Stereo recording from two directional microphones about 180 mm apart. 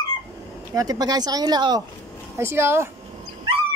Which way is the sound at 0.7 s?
20° right (ahead or behind).